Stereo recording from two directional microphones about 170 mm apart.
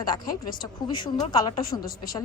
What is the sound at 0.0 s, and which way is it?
A woman's voice, 25° left (ahead or behind).